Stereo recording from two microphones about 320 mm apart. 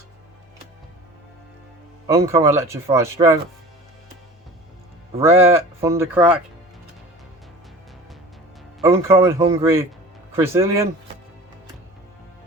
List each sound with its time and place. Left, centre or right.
2.0 s speech: centre
5.1 s speech: centre
8.8 s speech: centre